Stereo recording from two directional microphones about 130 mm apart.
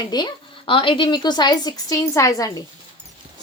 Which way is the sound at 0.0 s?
35° left (ahead or behind).